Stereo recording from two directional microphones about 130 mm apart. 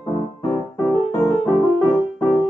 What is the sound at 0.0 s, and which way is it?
Keyboard, 25° left (ahead or behind).